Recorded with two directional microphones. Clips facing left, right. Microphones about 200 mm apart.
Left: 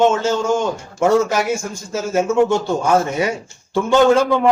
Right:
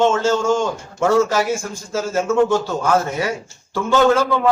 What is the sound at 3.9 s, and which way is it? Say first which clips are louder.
Speech: left 2 dB; 15° left (ahead or behind).